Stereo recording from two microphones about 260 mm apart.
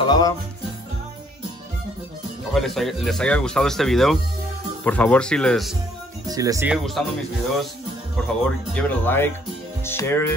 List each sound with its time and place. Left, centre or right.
0.0 s speech: centre
2.5 s speech: centre
6.2 s speech: centre
8.2 s speech: centre